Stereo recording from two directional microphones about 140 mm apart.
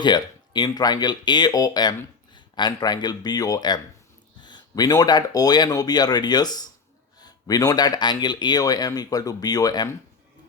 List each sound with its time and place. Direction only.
0.0 s speech: 35° left (ahead or behind)